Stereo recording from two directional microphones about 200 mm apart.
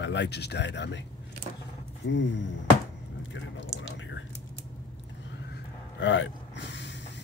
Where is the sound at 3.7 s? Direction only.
65° left (ahead or behind).